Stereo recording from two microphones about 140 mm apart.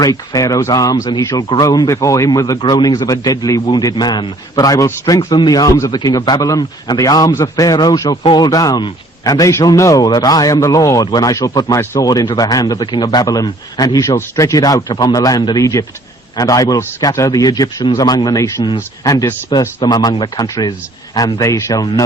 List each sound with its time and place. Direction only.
0.0 s a man's voice: 25° left (ahead or behind)